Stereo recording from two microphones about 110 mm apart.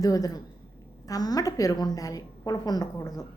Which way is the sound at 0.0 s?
35° left (ahead or behind).